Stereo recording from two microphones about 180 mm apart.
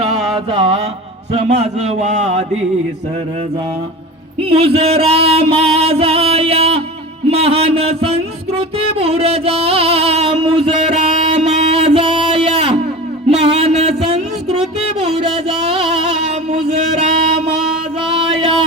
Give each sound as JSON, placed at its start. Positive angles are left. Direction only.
{"t": 0.3, "sound": "mantra", "side_deg": -30}
{"t": 1.3, "sound": "music", "side_deg": -35}
{"t": 4.4, "sound": "music", "side_deg": -30}
{"t": 16.5, "sound": "a sound", "side_deg": -35}